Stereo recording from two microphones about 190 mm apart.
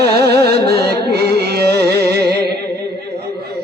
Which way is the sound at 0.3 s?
55° right (ahead or behind).